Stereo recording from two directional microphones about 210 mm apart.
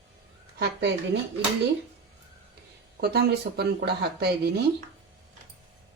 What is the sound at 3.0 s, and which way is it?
Speech, 50° right (ahead or behind).